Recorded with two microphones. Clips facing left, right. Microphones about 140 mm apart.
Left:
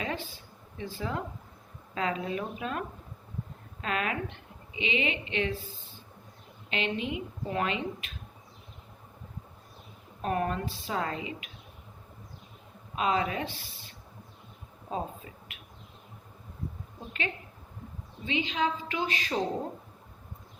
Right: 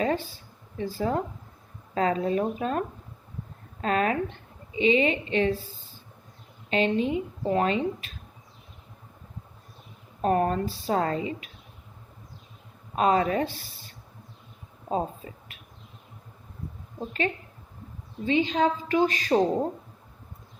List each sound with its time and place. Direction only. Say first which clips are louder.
0.0 s a sound: right 8 dB; 40° right (ahead or behind)
0.8 s a woman's voice: right 7 dB; 40° right (ahead or behind)
6.7 s speech: right 8 dB; 40° right (ahead or behind)
10.2 s speech: right 6 dB; 35° right (ahead or behind)
13.0 s speech: right 6 dB; 45° right (ahead or behind)
18.3 s speech: right 7 dB; 40° right (ahead or behind)